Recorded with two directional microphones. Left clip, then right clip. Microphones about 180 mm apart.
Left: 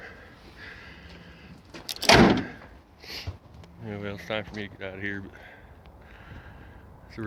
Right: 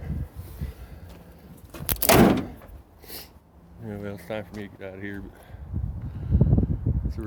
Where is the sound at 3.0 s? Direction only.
35° right (ahead or behind).